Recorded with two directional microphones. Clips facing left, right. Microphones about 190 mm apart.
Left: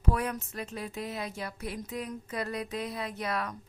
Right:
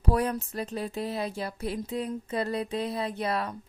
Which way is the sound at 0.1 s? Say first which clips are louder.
Right 5 dB; 35° right (ahead or behind).